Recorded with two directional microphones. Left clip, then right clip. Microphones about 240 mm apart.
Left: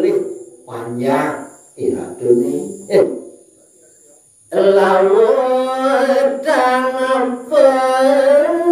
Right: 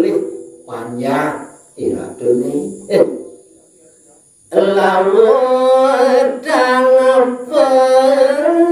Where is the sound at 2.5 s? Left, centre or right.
Centre.